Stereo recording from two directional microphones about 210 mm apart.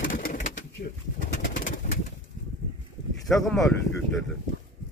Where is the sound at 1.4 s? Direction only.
60° left (ahead or behind).